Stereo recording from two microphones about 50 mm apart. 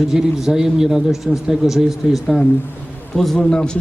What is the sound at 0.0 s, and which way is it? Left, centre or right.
A man's voice, centre.